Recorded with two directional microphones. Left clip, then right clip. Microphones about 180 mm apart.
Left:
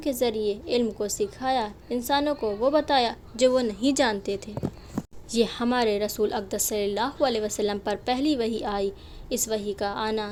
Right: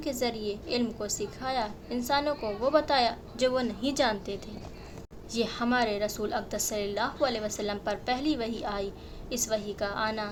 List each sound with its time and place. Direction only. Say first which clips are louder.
0.0 s a woman's voice: left 6 dB; 45° left (ahead or behind)